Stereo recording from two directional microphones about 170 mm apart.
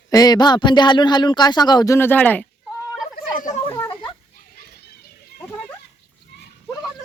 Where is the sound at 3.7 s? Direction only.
15° left (ahead or behind).